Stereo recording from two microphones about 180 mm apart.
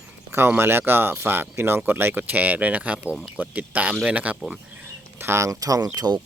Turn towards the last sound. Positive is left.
turn(degrees=-25)  # may be behind; listen again after turning